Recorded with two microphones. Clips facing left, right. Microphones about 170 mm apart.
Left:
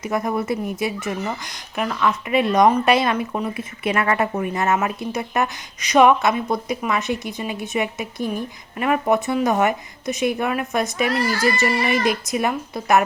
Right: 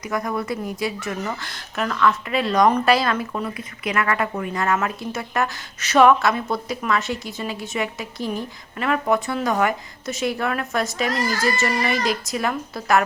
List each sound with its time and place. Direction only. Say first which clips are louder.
0.0 s speech: left 3 dB; 25° left (ahead or behind)
11.1 s speech: left 2 dB; 40° right (ahead or behind)
11.5 s speech: left 2 dB; 15° left (ahead or behind)